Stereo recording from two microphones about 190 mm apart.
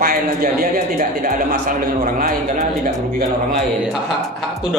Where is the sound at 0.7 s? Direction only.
45° right (ahead or behind).